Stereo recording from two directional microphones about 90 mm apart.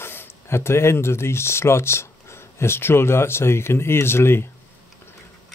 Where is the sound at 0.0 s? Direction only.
25° left (ahead or behind).